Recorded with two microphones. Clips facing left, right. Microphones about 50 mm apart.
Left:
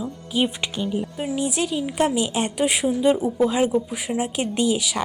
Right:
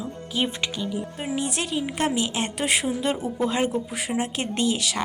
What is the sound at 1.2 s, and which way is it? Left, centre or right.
A woman's voice, centre.